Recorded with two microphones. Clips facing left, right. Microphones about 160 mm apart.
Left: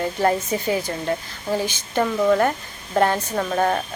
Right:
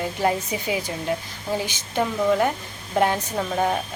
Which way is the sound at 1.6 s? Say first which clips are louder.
Left 2 dB; 15° right (ahead or behind).